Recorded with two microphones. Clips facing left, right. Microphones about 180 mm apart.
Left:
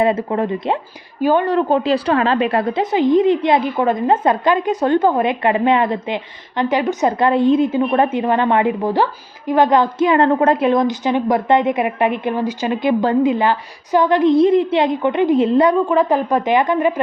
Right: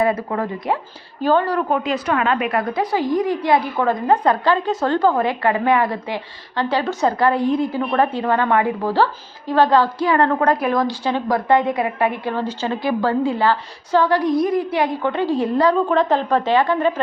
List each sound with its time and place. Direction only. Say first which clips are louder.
0.0 s a woman's voice: left 3 dB; 25° left (ahead or behind)
15.9 s speech: left 2 dB; 10° left (ahead or behind)